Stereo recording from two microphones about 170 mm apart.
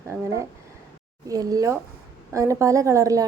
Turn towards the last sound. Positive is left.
turn(degrees=-20)  # may be behind; listen again after turning